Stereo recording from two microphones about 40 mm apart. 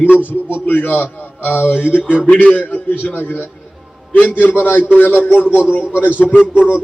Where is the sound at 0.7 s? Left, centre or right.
Left.